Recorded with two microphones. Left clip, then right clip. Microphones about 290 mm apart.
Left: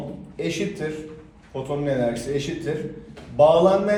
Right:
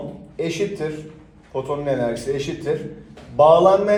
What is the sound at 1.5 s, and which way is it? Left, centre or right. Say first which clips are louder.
Speech: right 5 dB; centre.